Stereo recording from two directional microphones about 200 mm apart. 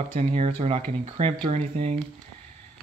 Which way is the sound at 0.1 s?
30° right (ahead or behind).